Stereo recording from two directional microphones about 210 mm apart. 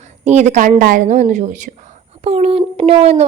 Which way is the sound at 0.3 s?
35° right (ahead or behind).